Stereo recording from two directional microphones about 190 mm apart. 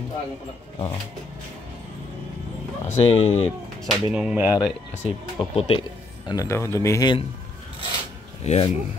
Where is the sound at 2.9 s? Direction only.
35° left (ahead or behind).